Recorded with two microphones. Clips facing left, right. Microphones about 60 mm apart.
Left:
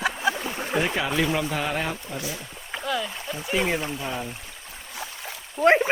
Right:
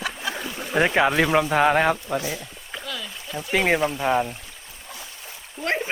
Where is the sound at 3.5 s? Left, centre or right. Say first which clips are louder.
Right 5 dB; right.